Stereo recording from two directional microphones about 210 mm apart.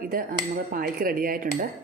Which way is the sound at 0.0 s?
45° right (ahead or behind).